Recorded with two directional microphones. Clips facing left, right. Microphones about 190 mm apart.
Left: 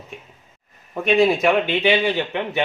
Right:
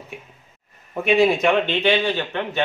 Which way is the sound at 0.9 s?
Centre (ahead or behind).